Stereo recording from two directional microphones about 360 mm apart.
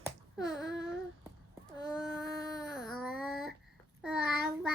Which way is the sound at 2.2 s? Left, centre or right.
Centre.